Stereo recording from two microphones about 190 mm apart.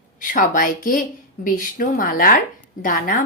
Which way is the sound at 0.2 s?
45° left (ahead or behind).